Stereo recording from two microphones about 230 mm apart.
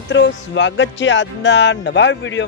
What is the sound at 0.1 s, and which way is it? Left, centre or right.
Speech, left.